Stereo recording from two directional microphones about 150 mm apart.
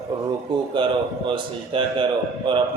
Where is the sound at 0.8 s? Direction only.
35° right (ahead or behind).